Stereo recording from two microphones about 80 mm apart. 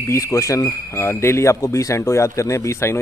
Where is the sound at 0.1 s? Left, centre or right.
Left.